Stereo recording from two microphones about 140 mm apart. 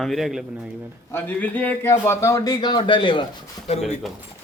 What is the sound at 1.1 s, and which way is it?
A man's voice, 10° left (ahead or behind).